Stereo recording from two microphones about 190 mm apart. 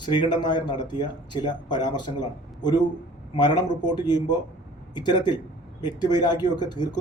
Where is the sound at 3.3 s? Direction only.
20° left (ahead or behind).